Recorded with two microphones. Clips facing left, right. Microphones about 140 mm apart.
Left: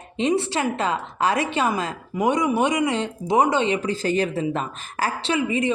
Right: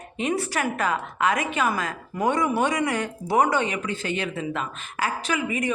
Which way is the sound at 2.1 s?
15° left (ahead or behind).